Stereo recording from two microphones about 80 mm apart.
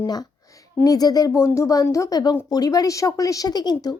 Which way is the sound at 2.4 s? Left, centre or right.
Left.